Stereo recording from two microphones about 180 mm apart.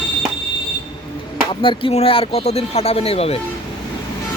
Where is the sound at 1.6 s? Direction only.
30° left (ahead or behind).